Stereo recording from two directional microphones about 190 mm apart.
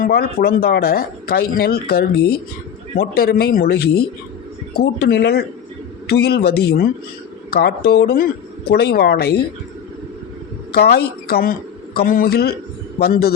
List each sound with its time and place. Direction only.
0.0 s speech: 55° left (ahead or behind)
10.7 s speech: 55° left (ahead or behind)